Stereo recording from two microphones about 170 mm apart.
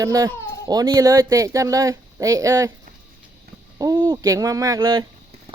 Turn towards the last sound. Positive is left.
turn(degrees=-20)  # may be behind; listen again after turning